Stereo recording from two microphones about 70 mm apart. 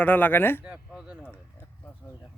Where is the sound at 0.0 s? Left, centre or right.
Left.